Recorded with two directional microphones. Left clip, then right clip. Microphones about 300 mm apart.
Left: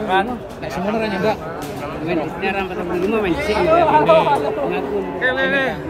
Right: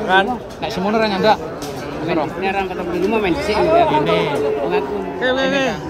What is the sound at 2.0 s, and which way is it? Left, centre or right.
Speech, centre.